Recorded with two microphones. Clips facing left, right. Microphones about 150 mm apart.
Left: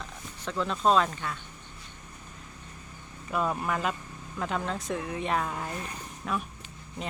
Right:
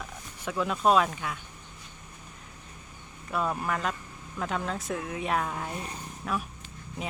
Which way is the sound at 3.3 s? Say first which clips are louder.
Left 1 dB; centre (ahead or behind).